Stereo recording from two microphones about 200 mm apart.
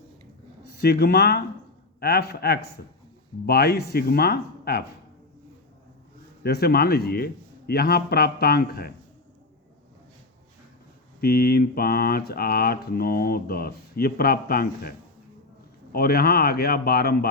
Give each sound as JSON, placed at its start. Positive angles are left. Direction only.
{"t": 0.7, "sound": "speech", "side_deg": 50}
{"t": 6.4, "sound": "speech", "side_deg": 50}
{"t": 11.2, "sound": "speech", "side_deg": 50}